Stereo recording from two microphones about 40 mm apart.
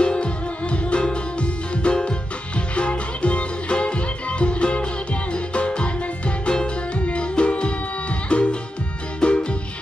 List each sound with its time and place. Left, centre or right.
0.0 s music: left